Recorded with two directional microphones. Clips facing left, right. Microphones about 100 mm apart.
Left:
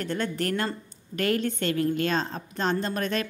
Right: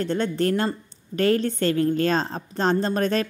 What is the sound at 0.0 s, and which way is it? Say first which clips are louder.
A woman's voice: right 6 dB; 25° right (ahead or behind).